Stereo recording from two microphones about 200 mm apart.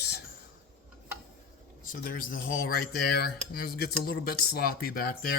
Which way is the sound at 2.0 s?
45° left (ahead or behind).